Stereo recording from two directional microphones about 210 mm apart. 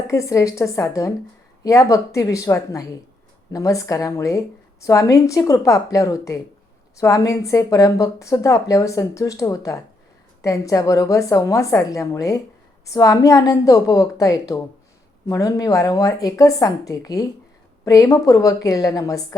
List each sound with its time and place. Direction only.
0.1 s a woman's voice: 15° left (ahead or behind)